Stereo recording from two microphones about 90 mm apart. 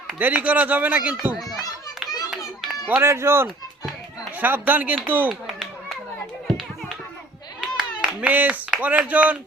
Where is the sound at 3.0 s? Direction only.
30° right (ahead or behind).